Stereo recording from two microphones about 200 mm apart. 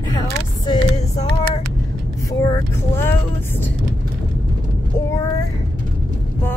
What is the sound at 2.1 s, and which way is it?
Vehicle, 15° left (ahead or behind).